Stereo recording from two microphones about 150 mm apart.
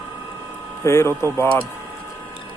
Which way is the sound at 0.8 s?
15° left (ahead or behind).